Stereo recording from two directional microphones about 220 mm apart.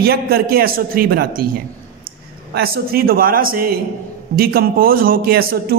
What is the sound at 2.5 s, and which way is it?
A man's voice, 45° right (ahead or behind).